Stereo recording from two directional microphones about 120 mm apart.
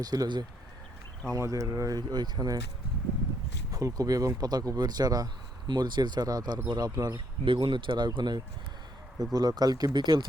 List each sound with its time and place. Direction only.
0.0 s speech: 30° right (ahead or behind)
3.7 s speech: 30° right (ahead or behind)
7.4 s speech: 45° right (ahead or behind)